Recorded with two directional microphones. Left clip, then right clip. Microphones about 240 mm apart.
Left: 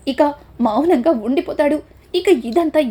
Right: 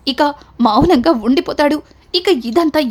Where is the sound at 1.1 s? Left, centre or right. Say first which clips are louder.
Right 3 dB; right.